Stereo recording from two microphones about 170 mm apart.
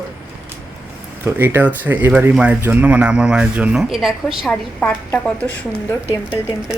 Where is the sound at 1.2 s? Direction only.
15° right (ahead or behind); by 5.4 s 5° left (ahead or behind).